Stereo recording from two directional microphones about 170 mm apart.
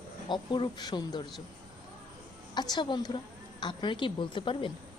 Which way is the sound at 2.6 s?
25° left (ahead or behind).